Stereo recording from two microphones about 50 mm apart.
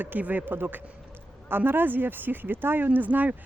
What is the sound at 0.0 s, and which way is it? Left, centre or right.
Speech, right.